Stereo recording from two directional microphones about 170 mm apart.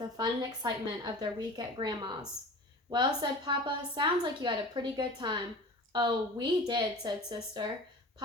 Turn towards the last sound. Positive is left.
turn(degrees=-25)  # may be behind; listen again after turning